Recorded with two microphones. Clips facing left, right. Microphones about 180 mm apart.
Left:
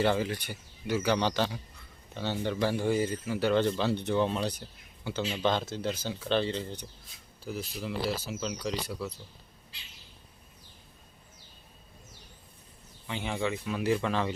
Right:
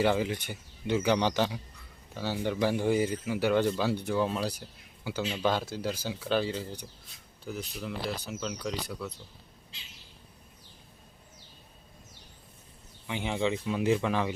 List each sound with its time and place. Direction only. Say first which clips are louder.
0.0 s a man's voice: right 1 dB; 15° right (ahead or behind); by 9.1 s centre (ahead or behind)
13.1 s a man's voice: right 2 dB; 15° right (ahead or behind)